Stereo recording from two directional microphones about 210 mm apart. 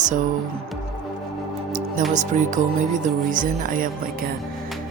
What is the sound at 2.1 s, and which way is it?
Speech, 35° right (ahead or behind).